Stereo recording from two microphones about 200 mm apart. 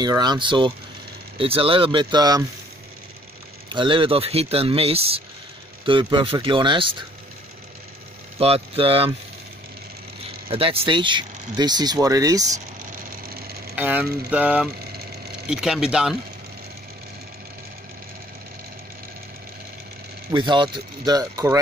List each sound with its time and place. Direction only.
0.0 s speech: 20° right (ahead or behind)
3.6 s speech: 25° right (ahead or behind)
8.4 s speech: 30° right (ahead or behind)
10.5 s speech: 30° right (ahead or behind)
13.3 s a sound: 50° right (ahead or behind)
13.7 s speech: 10° right (ahead or behind)
20.2 s speech: 25° right (ahead or behind)